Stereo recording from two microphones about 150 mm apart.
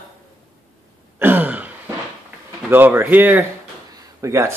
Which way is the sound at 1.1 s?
10° right (ahead or behind).